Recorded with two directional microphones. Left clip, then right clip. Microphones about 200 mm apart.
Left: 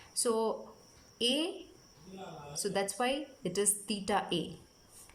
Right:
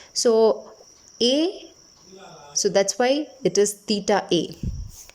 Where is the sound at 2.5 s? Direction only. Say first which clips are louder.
Right 14 dB; 35° right (ahead or behind).